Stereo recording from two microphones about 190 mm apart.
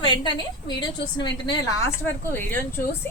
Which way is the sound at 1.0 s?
65° left (ahead or behind).